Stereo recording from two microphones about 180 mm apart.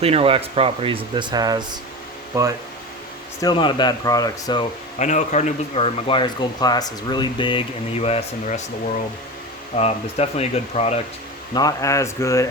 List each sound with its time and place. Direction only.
0.0 s speech: 35° right (ahead or behind)
3.4 s speech: 25° left (ahead or behind)
4.9 s speech: 40° left (ahead or behind)
9.7 s speech: 35° left (ahead or behind)
11.5 s speech: 20° left (ahead or behind)